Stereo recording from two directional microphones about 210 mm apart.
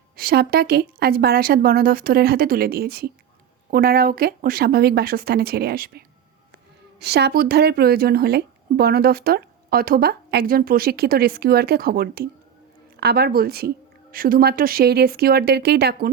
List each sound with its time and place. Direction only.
0.2 s speech: 45° right (ahead or behind)
7.0 s speech: 50° right (ahead or behind)